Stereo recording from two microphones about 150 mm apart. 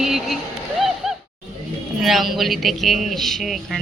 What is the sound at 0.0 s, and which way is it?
Speech, centre (ahead or behind).